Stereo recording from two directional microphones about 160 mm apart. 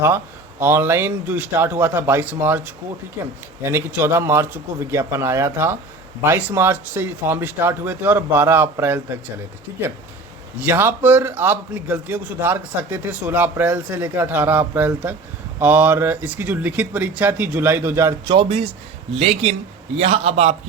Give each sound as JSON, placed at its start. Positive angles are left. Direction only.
{"t": 0.6, "sound": "a man's voice", "side_deg": -15}
{"t": 3.6, "sound": "a man's voice", "side_deg": -15}
{"t": 10.6, "sound": "a man's voice", "side_deg": -15}
{"t": 18.3, "sound": "a man's voice", "side_deg": -35}